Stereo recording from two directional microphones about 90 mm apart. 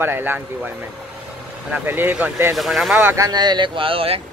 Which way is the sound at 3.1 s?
45° right (ahead or behind).